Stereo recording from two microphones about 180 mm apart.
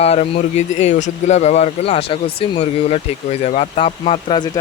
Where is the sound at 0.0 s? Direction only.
35° left (ahead or behind).